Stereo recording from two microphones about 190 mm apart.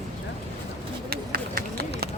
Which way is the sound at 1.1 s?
55° right (ahead or behind).